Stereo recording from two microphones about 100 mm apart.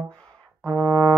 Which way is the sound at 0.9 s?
30° right (ahead or behind).